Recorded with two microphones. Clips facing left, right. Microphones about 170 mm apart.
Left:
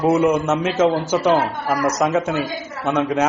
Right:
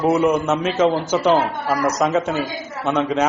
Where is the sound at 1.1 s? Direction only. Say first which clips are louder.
Even; 10° left (ahead or behind).